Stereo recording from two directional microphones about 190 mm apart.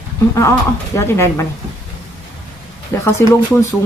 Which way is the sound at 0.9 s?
15° left (ahead or behind).